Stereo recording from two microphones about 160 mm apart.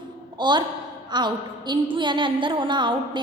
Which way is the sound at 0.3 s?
30° right (ahead or behind).